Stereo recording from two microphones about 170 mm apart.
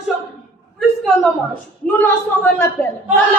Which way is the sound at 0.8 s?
Centre (ahead or behind).